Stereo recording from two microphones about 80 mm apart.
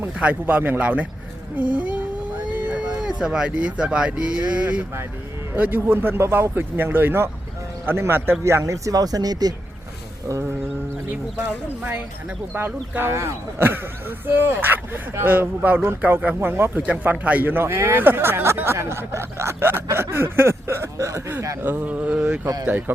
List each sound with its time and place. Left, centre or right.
0.2 s speech: centre; by 9.5 s right
12.5 s speech: right
21.6 s speech: right